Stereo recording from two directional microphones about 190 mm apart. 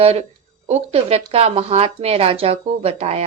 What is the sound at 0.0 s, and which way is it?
Speech, 35° right (ahead or behind).